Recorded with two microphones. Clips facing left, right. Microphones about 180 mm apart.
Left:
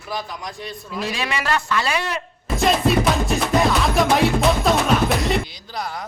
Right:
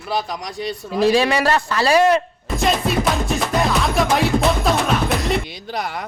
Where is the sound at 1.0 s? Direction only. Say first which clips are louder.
Right 10 dB; 30° right (ahead or behind).